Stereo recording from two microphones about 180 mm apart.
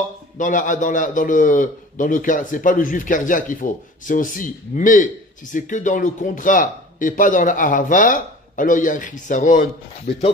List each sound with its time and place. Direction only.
0.4 s speech: 45° left (ahead or behind)